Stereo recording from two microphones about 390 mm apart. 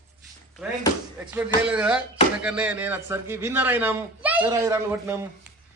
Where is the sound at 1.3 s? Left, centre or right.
Centre.